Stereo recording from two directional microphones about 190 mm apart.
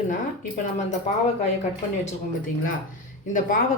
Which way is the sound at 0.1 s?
45° left (ahead or behind).